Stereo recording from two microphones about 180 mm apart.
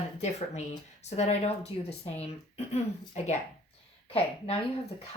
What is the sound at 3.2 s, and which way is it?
Speech, 40° left (ahead or behind).